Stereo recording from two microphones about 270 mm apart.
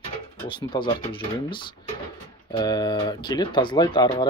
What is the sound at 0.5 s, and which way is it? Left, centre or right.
Speech, centre.